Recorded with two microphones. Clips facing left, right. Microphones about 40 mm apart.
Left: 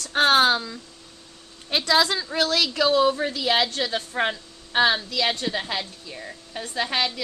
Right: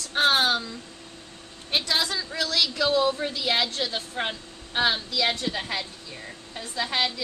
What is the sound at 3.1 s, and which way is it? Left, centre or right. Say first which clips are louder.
Speech: left 3 dB; left.